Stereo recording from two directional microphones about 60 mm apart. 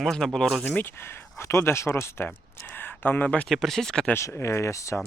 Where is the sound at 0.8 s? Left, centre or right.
Left.